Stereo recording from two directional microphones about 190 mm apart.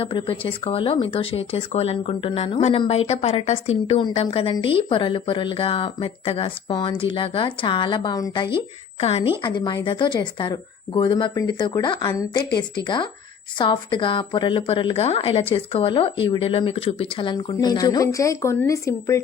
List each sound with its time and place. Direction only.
0.0 s speech: 25° left (ahead or behind)